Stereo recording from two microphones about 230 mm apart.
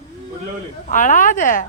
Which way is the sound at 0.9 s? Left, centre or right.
Left.